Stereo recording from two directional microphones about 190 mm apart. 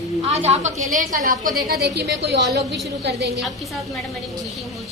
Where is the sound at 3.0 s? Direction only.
60° right (ahead or behind).